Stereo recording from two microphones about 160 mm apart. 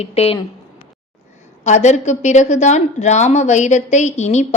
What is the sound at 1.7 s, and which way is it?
A woman's voice, 45° left (ahead or behind).